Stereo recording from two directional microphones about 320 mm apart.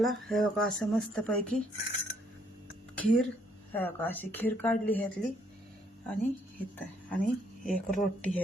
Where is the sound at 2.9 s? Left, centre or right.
Centre.